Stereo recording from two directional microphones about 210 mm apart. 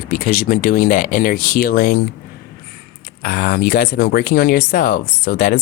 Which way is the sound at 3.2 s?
45° left (ahead or behind).